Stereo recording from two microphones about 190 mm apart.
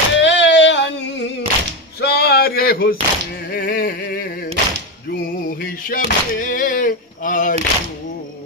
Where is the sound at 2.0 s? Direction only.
55° left (ahead or behind).